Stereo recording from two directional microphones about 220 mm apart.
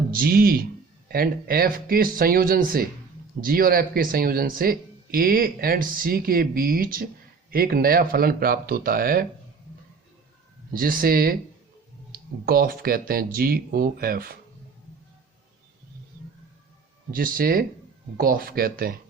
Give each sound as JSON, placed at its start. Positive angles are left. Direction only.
{"t": 0.1, "sound": "speech", "side_deg": -40}
{"t": 10.7, "sound": "speech", "side_deg": -40}
{"t": 17.1, "sound": "speech", "side_deg": -40}